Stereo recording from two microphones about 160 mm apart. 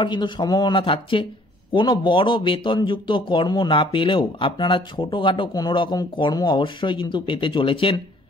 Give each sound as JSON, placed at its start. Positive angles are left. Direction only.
{"t": 0.0, "sound": "speech", "side_deg": 30}